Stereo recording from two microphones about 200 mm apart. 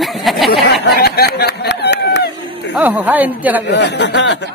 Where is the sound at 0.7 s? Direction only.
55° left (ahead or behind).